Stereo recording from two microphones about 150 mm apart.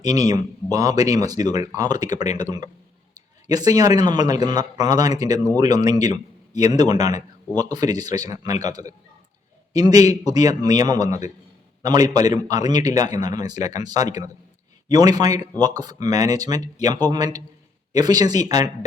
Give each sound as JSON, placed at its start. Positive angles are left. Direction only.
{"t": 0.0, "sound": "a man's voice", "side_deg": -25}